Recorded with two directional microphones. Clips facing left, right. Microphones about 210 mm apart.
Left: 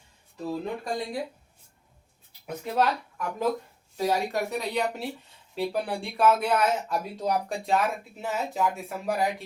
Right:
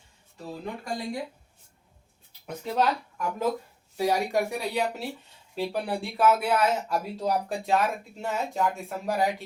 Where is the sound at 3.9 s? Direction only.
15° right (ahead or behind).